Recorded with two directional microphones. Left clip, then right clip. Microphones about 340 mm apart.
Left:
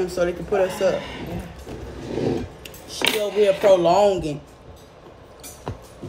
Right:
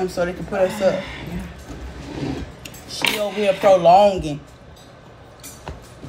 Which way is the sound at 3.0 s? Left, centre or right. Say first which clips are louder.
Right 1 dB; left.